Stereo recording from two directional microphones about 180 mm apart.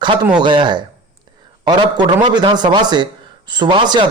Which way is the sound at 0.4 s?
25° right (ahead or behind).